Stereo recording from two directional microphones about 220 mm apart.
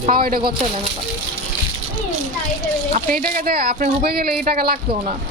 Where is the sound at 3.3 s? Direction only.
40° right (ahead or behind).